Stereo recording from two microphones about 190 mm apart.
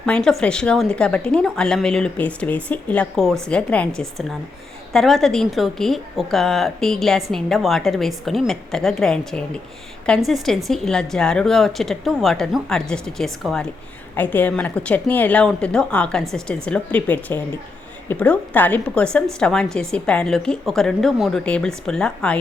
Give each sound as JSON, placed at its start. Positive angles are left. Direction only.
{"t": 0.0, "sound": "a woman's voice", "side_deg": 5}